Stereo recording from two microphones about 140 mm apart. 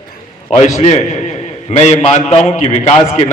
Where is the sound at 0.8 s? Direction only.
50° left (ahead or behind).